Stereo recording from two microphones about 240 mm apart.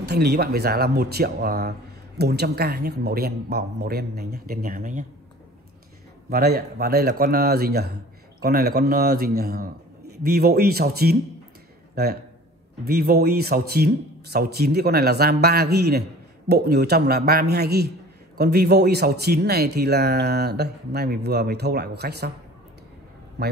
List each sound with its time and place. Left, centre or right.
0.0 s speech: right
6.3 s speech: right
11.9 s speech: right
23.4 s a man's voice: right